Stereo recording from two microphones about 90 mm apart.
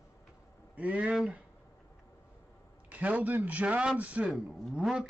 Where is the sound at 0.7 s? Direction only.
15° right (ahead or behind).